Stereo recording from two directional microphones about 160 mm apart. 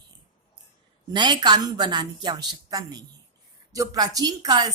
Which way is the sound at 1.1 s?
30° right (ahead or behind).